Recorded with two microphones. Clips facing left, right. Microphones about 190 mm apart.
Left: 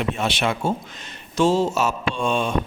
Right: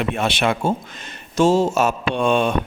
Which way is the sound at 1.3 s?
45° right (ahead or behind).